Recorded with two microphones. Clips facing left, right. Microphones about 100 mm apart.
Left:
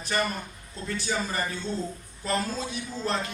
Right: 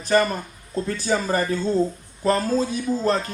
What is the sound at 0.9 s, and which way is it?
Speech, 40° right (ahead or behind).